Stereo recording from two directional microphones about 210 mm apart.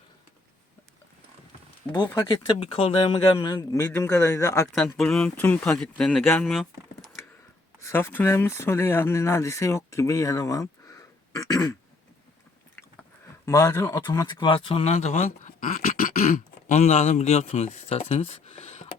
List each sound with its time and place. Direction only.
2.0 s speech: 20° left (ahead or behind)
4.9 s speech: 5° left (ahead or behind)
7.8 s speech: 10° left (ahead or behind)
13.4 s speech: 15° left (ahead or behind); by 16.2 s 40° left (ahead or behind)
16.6 s speech: 30° left (ahead or behind)